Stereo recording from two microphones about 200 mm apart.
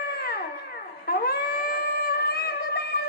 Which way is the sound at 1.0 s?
50° left (ahead or behind).